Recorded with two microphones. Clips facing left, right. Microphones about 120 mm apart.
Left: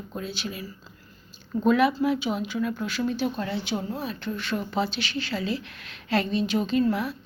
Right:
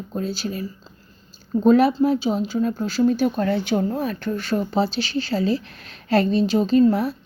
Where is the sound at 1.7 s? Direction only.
35° right (ahead or behind).